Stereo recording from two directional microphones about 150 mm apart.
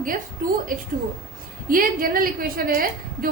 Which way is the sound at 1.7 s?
70° right (ahead or behind).